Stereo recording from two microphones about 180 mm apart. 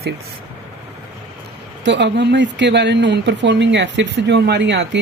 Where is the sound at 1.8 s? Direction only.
75° right (ahead or behind).